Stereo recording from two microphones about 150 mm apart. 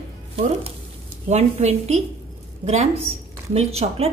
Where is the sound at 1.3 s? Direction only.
45° right (ahead or behind).